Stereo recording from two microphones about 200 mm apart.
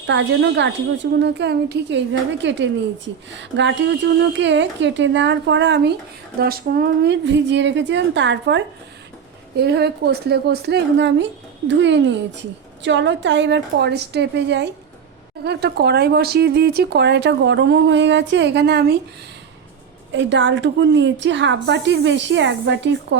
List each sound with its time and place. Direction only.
0.1 s a woman's voice: 65° right (ahead or behind)
6.4 s a woman's voice: 50° right (ahead or behind)
20.1 s a woman's voice: 65° right (ahead or behind)